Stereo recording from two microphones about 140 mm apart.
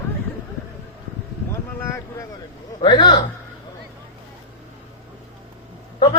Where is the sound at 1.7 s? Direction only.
20° left (ahead or behind).